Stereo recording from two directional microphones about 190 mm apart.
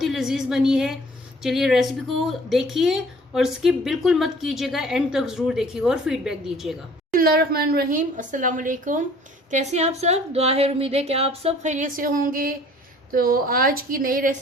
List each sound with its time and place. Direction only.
0.0 s a woman's voice: centre (ahead or behind)
7.1 s a woman's voice: 50° right (ahead or behind)